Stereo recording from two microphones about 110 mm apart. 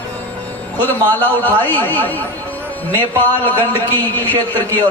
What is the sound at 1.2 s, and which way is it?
A man's voice, 15° left (ahead or behind).